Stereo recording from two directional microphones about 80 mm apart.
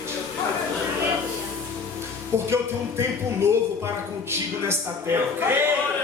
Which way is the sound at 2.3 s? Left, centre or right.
Right.